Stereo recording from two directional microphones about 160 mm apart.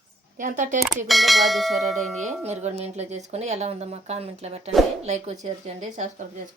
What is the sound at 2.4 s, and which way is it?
A woman's voice, 45° right (ahead or behind).